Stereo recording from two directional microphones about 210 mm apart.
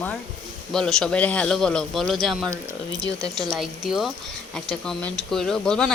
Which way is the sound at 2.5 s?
15° right (ahead or behind).